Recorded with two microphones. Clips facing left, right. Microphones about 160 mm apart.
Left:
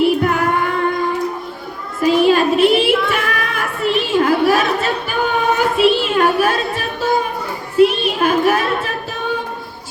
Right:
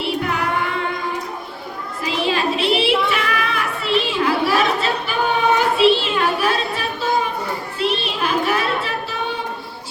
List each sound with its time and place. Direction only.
0.0 s child singing: 50° left (ahead or behind)
2.0 s a sound: 50° left (ahead or behind)
7.8 s child singing: 50° left (ahead or behind)